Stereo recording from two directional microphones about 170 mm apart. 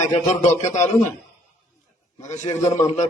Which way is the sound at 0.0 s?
45° left (ahead or behind).